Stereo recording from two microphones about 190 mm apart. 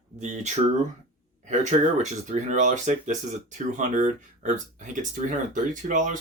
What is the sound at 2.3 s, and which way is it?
Speech, 40° right (ahead or behind).